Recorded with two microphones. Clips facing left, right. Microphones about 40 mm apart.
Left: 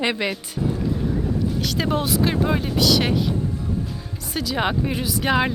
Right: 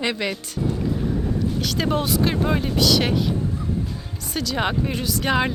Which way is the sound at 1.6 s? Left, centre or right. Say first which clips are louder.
Right 1 dB; centre.